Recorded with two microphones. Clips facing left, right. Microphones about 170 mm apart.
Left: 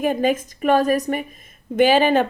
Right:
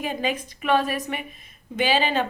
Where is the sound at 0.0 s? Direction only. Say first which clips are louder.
Left 8 dB; 50° left (ahead or behind).